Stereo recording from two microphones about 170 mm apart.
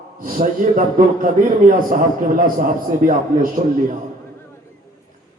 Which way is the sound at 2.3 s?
55° right (ahead or behind).